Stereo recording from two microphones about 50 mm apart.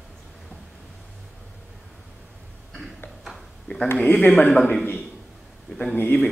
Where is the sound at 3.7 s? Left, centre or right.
Left.